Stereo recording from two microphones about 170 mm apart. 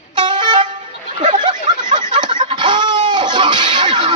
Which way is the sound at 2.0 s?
50° right (ahead or behind).